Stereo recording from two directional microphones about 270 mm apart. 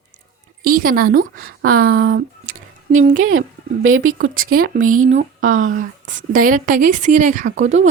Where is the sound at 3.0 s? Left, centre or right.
Right.